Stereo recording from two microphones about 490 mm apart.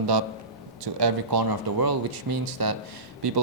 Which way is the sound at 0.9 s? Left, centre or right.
Right.